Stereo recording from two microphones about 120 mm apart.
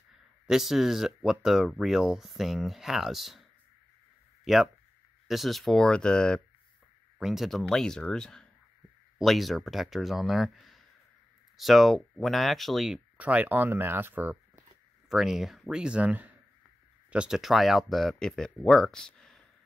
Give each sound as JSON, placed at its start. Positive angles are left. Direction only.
{"t": 0.5, "sound": "speech", "side_deg": -5}
{"t": 5.3, "sound": "speech", "side_deg": 0}
{"t": 13.2, "sound": "speech", "side_deg": -10}
{"t": 15.0, "sound": "speech", "side_deg": -5}